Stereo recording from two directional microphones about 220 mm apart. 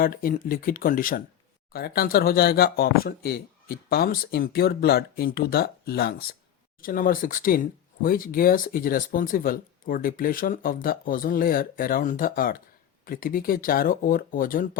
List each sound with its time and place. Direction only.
0.0 s speech: 40° left (ahead or behind)